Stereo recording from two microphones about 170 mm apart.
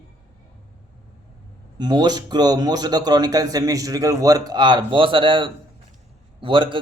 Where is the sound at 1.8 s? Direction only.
25° right (ahead or behind).